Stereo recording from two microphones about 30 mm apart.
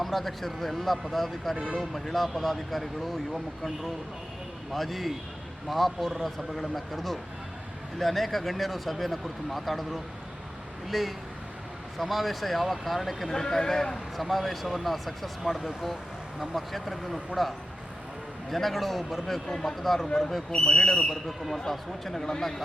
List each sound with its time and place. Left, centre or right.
0.0 s speech: centre
13.3 s speech: centre
13.9 s speech: centre
18.5 s speech: centre
19.5 s speech: centre
21.2 s speech: centre
21.7 s speech: centre